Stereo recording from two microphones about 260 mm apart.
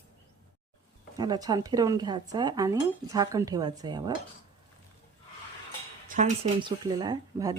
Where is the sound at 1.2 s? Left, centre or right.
Centre.